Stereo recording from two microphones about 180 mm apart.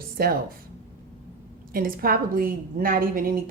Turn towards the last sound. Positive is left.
turn(degrees=-50)  # may be behind; listen again after turning